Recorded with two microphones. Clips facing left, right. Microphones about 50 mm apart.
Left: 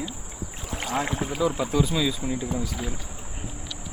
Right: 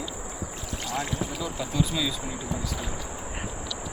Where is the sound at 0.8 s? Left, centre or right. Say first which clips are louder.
Left 4 dB; left.